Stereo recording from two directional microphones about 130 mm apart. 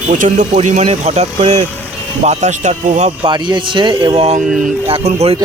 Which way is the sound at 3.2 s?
40° right (ahead or behind).